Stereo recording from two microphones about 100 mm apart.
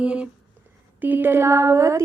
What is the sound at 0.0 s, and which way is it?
Speech, 10° right (ahead or behind).